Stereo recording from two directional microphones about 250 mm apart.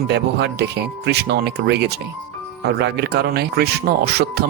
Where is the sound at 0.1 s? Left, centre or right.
Right.